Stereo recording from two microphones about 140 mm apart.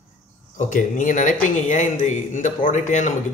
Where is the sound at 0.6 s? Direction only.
65° left (ahead or behind).